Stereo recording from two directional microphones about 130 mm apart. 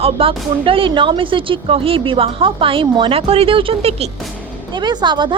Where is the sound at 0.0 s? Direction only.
45° right (ahead or behind).